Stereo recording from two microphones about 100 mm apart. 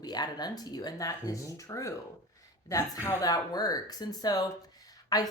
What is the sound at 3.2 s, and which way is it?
Speech, 40° left (ahead or behind).